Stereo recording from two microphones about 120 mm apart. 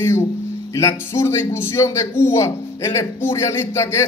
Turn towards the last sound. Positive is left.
turn(degrees=20)  # may be behind; listen again after turning